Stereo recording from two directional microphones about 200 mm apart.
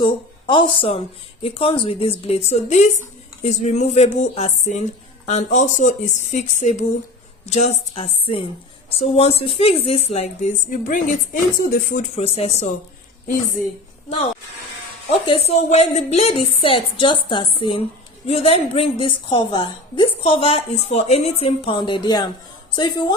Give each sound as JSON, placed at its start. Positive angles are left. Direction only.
{"t": 0.0, "sound": "a woman's voice", "side_deg": 25}
{"t": 12.1, "sound": "a woman's voice", "side_deg": 30}
{"t": 15.0, "sound": "a woman's voice", "side_deg": 30}